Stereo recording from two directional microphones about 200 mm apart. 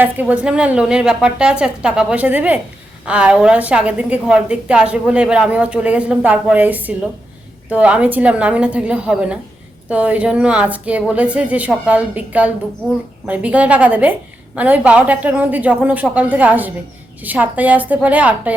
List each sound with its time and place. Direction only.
0.0 s a woman's voice: 10° right (ahead or behind)